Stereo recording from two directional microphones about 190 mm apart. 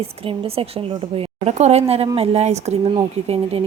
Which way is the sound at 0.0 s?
30° right (ahead or behind).